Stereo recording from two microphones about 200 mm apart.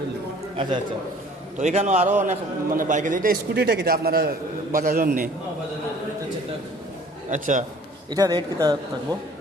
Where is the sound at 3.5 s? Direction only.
55° right (ahead or behind).